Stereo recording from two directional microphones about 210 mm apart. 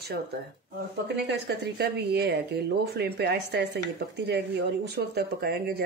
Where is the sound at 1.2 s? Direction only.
55° right (ahead or behind).